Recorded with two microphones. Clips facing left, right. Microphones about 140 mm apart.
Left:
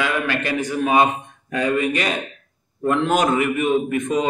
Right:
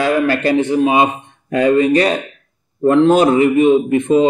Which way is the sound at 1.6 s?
30° right (ahead or behind).